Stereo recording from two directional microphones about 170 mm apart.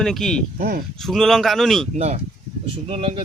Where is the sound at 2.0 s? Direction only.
40° right (ahead or behind).